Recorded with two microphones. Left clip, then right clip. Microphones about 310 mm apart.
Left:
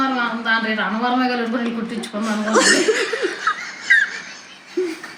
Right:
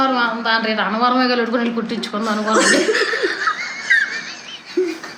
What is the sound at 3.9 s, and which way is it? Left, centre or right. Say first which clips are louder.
Fowl: left 1 dB; centre.